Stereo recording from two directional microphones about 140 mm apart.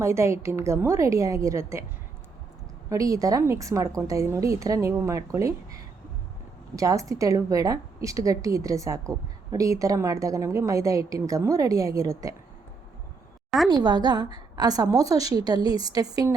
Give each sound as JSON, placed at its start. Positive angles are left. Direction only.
{"t": 0.0, "sound": "a woman's voice", "side_deg": -20}
{"t": 2.9, "sound": "a woman's voice", "side_deg": -25}
{"t": 6.7, "sound": "a woman's voice", "side_deg": -25}
{"t": 13.7, "sound": "a woman's voice", "side_deg": -30}